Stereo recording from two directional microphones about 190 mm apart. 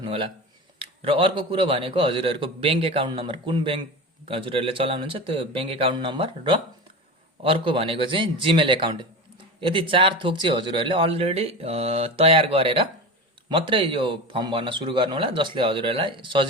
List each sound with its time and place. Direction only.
0.0 s speech: 30° right (ahead or behind)